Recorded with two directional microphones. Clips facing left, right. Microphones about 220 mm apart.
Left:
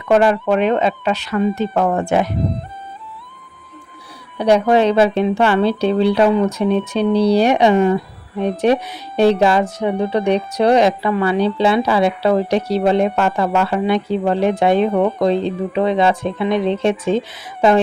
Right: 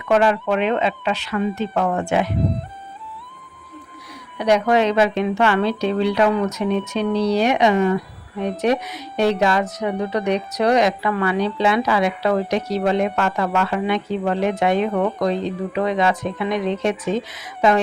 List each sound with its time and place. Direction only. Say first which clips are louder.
0.1 s a woman's voice: left 3 dB; 40° left (ahead or behind)
4.4 s a woman's voice: left 4 dB; 30° left (ahead or behind)